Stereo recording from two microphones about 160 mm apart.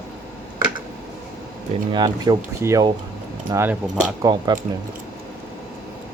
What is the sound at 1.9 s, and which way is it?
Speech, 25° right (ahead or behind).